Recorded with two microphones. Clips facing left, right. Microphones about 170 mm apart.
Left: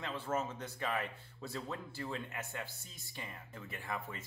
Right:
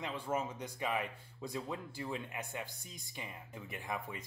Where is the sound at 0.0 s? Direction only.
15° right (ahead or behind).